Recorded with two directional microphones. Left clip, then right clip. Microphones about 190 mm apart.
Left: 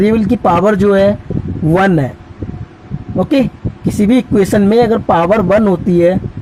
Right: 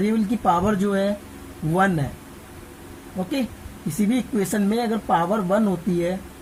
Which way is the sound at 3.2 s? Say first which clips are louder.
Left 14 dB; 45° left (ahead or behind).